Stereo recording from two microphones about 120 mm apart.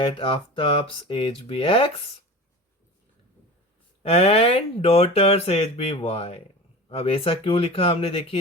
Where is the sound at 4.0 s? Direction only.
55° left (ahead or behind).